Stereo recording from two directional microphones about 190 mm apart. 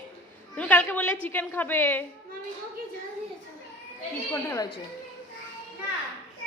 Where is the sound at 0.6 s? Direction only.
10° left (ahead or behind).